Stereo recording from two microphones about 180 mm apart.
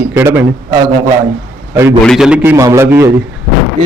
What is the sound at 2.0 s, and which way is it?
Speech, centre (ahead or behind).